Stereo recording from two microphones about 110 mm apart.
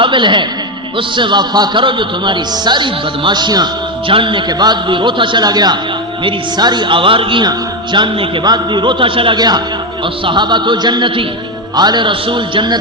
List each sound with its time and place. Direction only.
0.0 s a man's voice: 45° right (ahead or behind)
4.1 s a man's voice: 50° right (ahead or behind)